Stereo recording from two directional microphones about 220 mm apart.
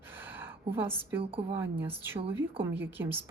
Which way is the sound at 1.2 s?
25° right (ahead or behind).